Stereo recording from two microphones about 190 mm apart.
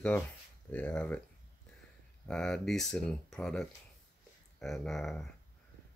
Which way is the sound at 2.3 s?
Centre (ahead or behind).